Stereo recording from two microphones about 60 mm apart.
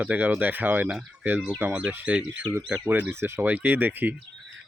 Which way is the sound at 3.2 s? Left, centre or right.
Right.